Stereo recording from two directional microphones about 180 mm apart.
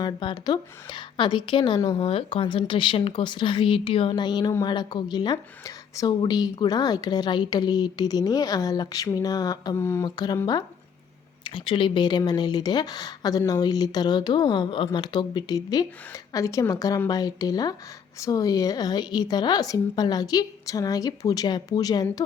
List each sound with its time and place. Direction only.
0.0 s a woman's voice: 25° left (ahead or behind)